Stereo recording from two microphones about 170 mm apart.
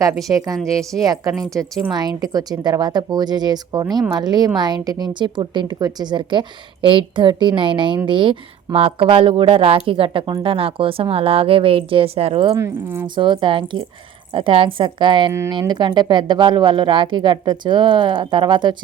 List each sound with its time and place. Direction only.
0.3 s speech: 20° right (ahead or behind)
12.5 s speech: 15° right (ahead or behind)
13.1 s speech: 30° right (ahead or behind)
15.3 s speech: 15° right (ahead or behind)